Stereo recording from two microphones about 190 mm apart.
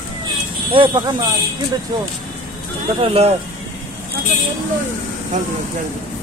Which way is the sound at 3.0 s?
30° right (ahead or behind).